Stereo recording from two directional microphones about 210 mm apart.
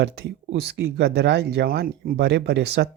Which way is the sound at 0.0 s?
50° right (ahead or behind).